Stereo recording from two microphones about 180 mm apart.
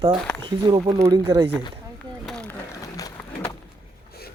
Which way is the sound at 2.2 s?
5° left (ahead or behind).